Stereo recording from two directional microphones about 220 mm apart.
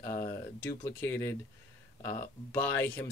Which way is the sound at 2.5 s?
10° left (ahead or behind).